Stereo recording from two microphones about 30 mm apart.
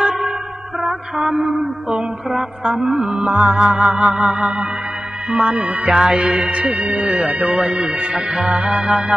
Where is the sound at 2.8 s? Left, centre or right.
Centre.